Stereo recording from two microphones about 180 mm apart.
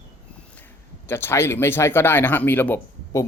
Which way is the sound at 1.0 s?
10° left (ahead or behind).